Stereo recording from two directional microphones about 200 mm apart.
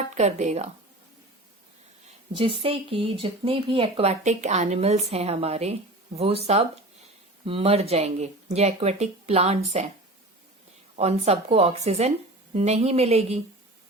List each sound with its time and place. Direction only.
0.1 s speech: 35° right (ahead or behind)
2.0 s speech: 25° right (ahead or behind)
10.9 s speech: 30° right (ahead or behind)